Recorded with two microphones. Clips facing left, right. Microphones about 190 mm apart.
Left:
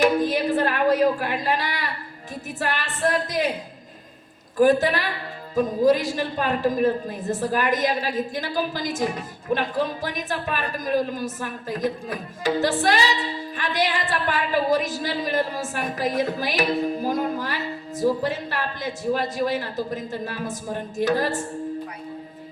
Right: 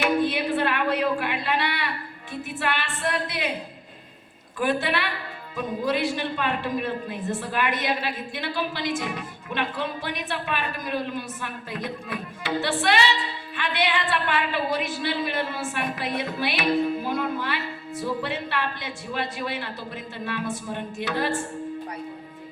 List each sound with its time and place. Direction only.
0.0 s a sound: 40° left (ahead or behind)
2.3 s a woman's voice: 40° left (ahead or behind)
4.5 s a woman's voice: 40° left (ahead or behind)